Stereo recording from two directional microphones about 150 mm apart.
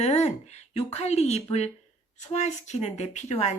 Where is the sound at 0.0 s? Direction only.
45° left (ahead or behind).